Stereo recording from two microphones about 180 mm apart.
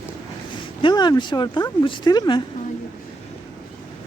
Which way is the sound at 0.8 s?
25° left (ahead or behind).